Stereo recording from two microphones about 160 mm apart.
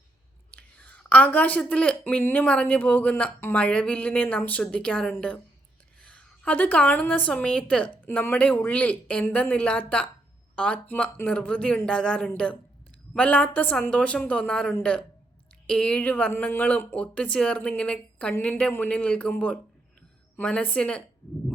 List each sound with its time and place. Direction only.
0.5 s a woman's voice: 10° left (ahead or behind)
6.0 s a sound: 5° left (ahead or behind)
7.3 s speech: 5° left (ahead or behind)